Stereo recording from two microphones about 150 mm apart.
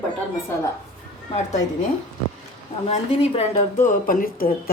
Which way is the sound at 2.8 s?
50° left (ahead or behind).